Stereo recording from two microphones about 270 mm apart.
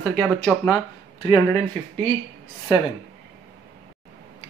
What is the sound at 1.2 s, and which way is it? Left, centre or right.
Speech, centre.